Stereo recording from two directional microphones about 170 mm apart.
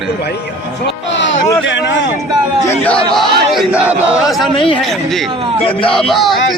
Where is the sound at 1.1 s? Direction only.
90° left.